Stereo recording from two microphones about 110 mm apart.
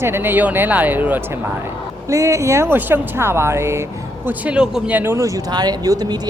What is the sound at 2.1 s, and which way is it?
Speech, 30° right (ahead or behind).